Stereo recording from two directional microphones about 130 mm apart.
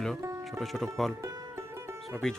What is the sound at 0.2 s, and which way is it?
Music, 20° right (ahead or behind).